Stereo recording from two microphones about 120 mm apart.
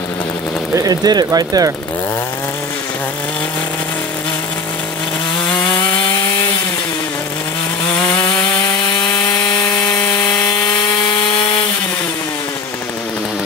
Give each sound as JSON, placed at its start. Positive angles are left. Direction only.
{"t": 0.7, "sound": "speech", "side_deg": -30}
{"t": 9.1, "sound": "sawing", "side_deg": 25}